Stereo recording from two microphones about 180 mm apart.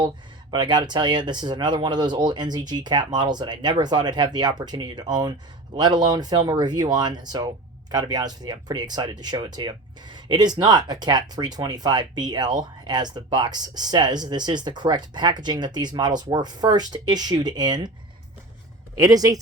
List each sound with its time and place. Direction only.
0.5 s speech: 25° right (ahead or behind)
18.9 s speech: 20° right (ahead or behind)